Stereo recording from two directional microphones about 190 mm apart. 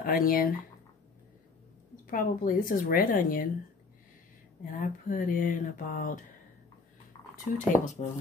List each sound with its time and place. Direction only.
0.0 s a woman's voice: 50° left (ahead or behind)
2.0 s a woman's voice: 45° left (ahead or behind)
4.7 s a woman's voice: 45° left (ahead or behind)
7.5 s speech: 40° left (ahead or behind)